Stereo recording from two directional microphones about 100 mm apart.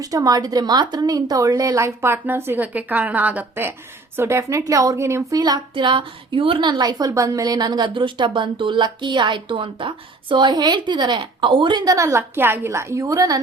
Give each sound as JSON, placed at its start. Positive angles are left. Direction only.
{"t": 0.0, "sound": "speech", "side_deg": -35}
{"t": 5.4, "sound": "a woman's voice", "side_deg": -50}